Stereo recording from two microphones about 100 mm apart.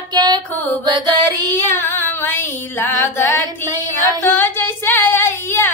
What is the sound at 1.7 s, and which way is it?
Female singing, 25° left (ahead or behind).